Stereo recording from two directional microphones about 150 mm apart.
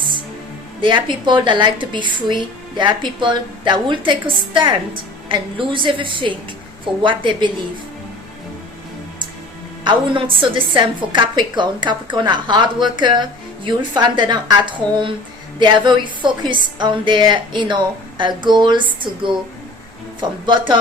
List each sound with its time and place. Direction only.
0.8 s a woman's voice: 35° right (ahead or behind)
9.8 s a woman's voice: 35° right (ahead or behind)